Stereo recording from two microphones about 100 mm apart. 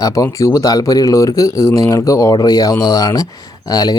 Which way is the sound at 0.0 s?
35° left (ahead or behind).